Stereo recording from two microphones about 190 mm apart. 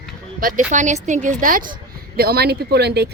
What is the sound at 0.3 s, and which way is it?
A woman's voice, 45° right (ahead or behind).